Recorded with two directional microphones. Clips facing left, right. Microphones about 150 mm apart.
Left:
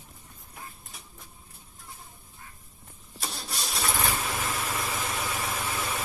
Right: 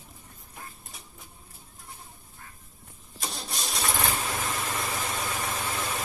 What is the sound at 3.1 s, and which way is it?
Engine starting, centre (ahead or behind).